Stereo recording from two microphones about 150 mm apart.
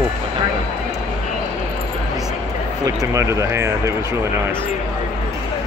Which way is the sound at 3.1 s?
20° right (ahead or behind).